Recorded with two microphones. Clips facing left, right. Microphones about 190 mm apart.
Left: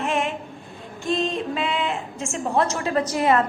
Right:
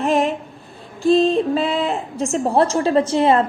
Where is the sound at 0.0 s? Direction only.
35° right (ahead or behind).